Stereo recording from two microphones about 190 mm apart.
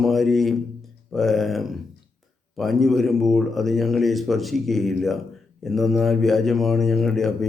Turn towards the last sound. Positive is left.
turn(degrees=0)  # may be behind; listen again after turning